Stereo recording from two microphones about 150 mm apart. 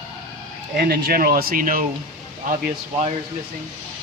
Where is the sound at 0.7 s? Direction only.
85° right; by 1.8 s 65° right (ahead or behind).